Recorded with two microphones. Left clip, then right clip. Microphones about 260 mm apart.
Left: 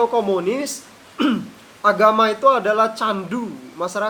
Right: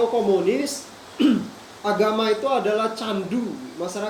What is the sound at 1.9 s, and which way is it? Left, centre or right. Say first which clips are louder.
Speech: left 6 dB; centre.